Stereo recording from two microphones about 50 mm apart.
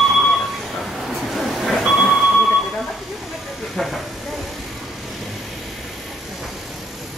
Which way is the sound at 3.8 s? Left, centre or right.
Centre.